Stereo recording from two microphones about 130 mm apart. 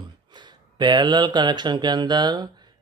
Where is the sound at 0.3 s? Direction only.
35° right (ahead or behind).